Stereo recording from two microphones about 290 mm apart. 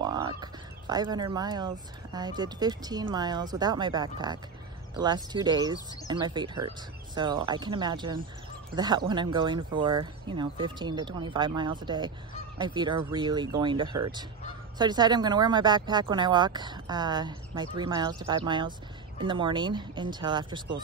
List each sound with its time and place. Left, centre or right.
0.0 s fowl: centre
2.1 s speech: centre